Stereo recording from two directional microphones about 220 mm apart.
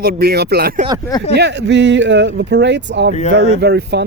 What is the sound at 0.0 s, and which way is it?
Speech, 45° right (ahead or behind).